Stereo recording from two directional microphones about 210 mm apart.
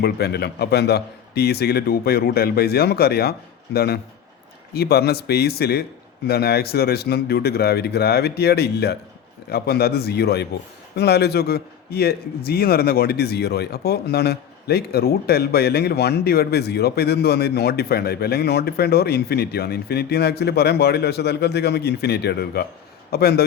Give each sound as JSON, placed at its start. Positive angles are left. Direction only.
{"t": 0.0, "sound": "a man's voice", "side_deg": 50}